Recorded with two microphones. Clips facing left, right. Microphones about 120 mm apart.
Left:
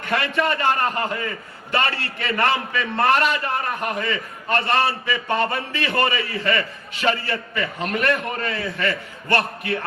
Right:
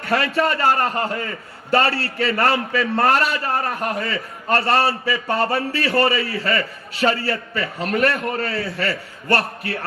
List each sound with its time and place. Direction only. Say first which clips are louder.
0.0 s a man's voice: right 3 dB; 35° right (ahead or behind)